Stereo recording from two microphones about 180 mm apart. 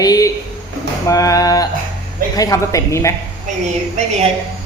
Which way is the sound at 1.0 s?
20° left (ahead or behind).